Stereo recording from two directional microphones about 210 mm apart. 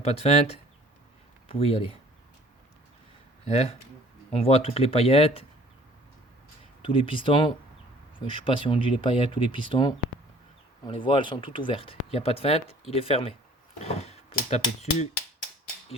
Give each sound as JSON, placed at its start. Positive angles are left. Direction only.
{"t": 0.0, "sound": "speech", "side_deg": 30}
{"t": 3.4, "sound": "speech", "side_deg": 30}
{"t": 6.8, "sound": "speech", "side_deg": 25}